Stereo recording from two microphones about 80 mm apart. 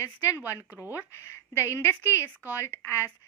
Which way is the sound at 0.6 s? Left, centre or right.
Right.